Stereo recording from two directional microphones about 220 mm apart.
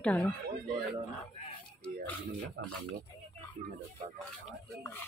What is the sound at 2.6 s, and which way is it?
Speech, 50° right (ahead or behind).